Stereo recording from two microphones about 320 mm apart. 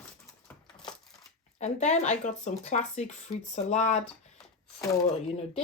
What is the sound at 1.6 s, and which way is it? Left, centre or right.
Speech, left.